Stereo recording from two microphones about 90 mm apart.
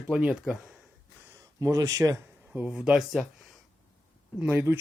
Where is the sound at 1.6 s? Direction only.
40° right (ahead or behind).